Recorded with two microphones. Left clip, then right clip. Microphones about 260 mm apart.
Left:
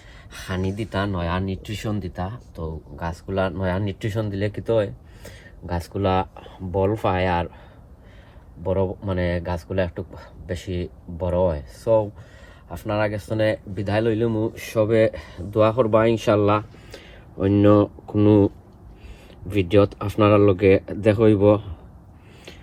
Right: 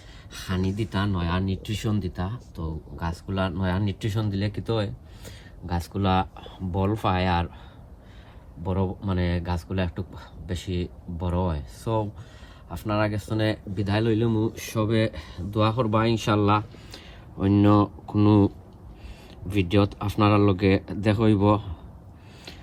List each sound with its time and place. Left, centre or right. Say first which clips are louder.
0.4 s speech: left 2 dB; centre
8.6 s speech: left 6 dB; centre
11.2 s speech: left 8 dB; centre